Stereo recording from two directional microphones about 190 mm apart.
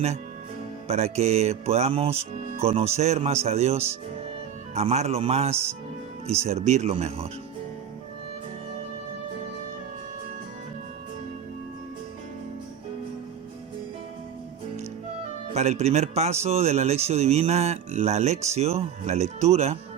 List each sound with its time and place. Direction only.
0.9 s speech: 35° right (ahead or behind)
15.5 s speech: 35° right (ahead or behind)